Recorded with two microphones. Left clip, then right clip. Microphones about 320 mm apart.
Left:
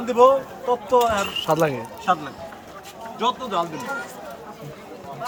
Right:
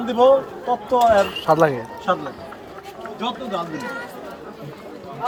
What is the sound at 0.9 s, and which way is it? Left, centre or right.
Speech, centre.